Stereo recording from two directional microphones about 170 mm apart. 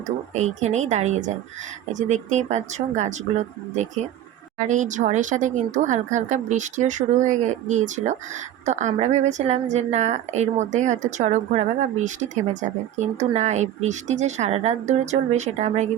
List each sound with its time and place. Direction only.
0.3 s a woman's voice: 45° right (ahead or behind)